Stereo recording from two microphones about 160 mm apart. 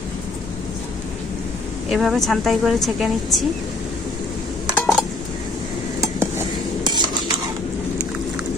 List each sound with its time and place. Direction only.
1.9 s a woman's voice: centre (ahead or behind)
4.6 s dishes: 5° right (ahead or behind)
6.0 s stir: 15° right (ahead or behind)
6.8 s stir: 25° right (ahead or behind)